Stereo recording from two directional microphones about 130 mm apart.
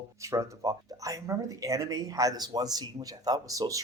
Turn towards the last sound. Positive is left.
turn(degrees=-25)  # may be behind; listen again after turning